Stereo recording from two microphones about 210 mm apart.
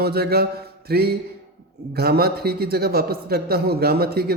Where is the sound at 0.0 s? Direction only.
50° right (ahead or behind).